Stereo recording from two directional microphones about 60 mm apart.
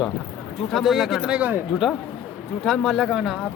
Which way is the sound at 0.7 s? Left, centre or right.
Centre.